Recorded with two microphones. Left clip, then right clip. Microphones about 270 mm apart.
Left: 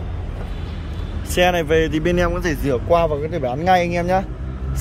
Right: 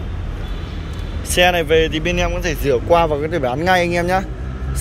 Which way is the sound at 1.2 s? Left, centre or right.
Centre.